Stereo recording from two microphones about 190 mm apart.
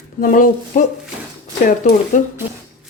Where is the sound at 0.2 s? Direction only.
45° left (ahead or behind).